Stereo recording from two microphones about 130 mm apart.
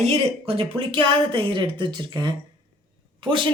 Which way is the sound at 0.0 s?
55° right (ahead or behind).